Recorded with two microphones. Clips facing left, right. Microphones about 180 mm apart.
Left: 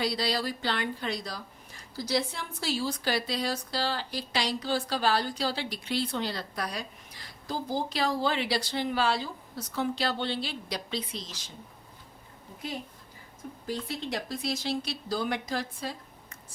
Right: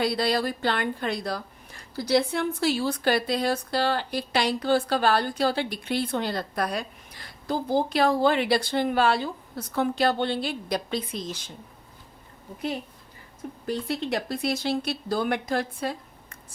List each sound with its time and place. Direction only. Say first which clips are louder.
0.0 s a woman's voice: right 5 dB; 55° right (ahead or behind)
13.7 s a woman's voice: right 6 dB; 60° right (ahead or behind)